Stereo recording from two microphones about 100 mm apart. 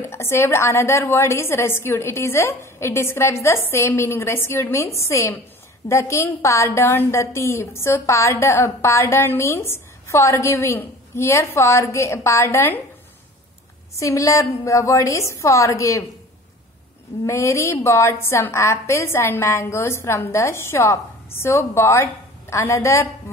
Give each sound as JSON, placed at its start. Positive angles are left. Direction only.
{"t": 0.0, "sound": "a woman's voice", "side_deg": 25}
{"t": 13.9, "sound": "a woman's voice", "side_deg": 30}
{"t": 17.2, "sound": "a woman's voice", "side_deg": 30}